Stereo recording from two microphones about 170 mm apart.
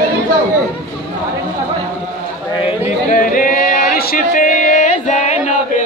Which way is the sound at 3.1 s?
55° left (ahead or behind).